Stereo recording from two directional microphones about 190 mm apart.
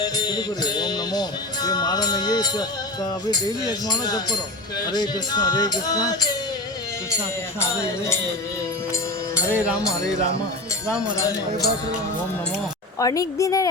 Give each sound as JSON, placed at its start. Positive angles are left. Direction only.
{"t": 0.0, "sound": "music", "side_deg": 20}
{"t": 7.6, "sound": "a woman's voice", "side_deg": 15}
{"t": 9.5, "sound": "speech", "side_deg": -5}
{"t": 13.0, "sound": "a woman's voice", "side_deg": 20}